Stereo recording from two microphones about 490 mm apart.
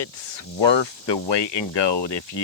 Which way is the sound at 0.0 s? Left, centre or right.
Left.